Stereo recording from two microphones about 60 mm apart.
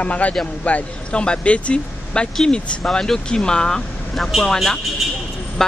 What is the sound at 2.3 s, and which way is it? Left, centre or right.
A man's voice, centre.